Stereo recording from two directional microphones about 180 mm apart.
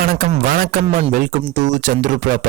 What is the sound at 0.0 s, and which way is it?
A man's voice, 55° right (ahead or behind).